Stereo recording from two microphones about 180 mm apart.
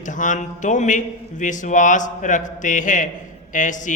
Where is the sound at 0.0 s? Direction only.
45° left (ahead or behind).